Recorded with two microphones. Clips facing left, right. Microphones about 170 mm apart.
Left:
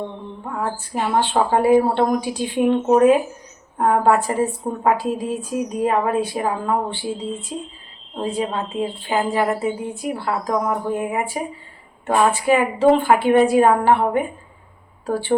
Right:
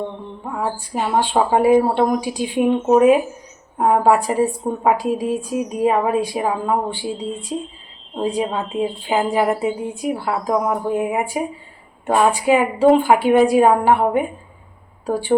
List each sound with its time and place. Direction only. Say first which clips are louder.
0.6 s a woman's voice: right 1 dB; 15° right (ahead or behind)